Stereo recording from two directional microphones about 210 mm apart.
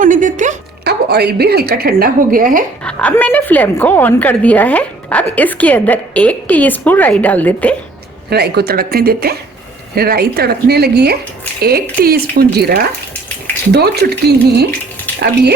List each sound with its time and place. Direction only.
0.0 s a woman's voice: 40° right (ahead or behind)
2.8 s a woman's voice: 5° left (ahead or behind)
8.3 s speech: 50° right (ahead or behind)